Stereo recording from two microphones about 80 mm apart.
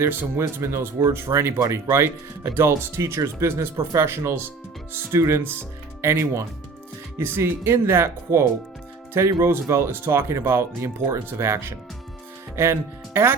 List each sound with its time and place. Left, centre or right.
0.0 s speech: right